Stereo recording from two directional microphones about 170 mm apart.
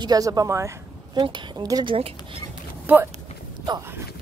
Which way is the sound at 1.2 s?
25° right (ahead or behind).